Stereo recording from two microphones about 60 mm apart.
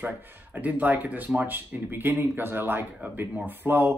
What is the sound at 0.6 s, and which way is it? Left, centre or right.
Speech, right.